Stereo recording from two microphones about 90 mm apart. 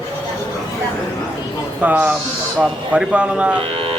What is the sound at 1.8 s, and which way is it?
A man's voice, 15° right (ahead or behind).